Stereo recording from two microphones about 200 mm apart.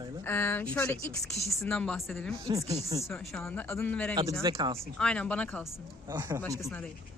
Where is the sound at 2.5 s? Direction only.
30° right (ahead or behind).